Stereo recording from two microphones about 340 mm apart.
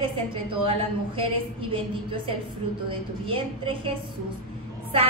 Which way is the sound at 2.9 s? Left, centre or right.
Centre.